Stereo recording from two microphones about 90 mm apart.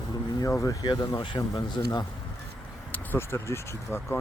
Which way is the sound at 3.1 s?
25° left (ahead or behind).